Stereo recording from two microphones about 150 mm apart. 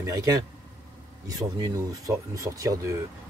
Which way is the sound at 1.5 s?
25° right (ahead or behind).